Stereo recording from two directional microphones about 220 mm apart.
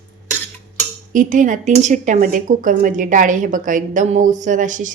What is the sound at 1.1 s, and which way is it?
Speech, 35° right (ahead or behind).